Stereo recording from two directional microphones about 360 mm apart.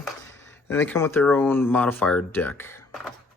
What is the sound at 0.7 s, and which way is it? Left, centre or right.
Speech, centre.